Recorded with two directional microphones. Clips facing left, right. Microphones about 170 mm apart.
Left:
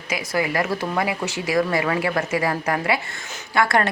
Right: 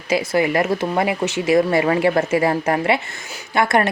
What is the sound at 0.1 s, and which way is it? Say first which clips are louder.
A woman's voice: right 6 dB; 25° right (ahead or behind).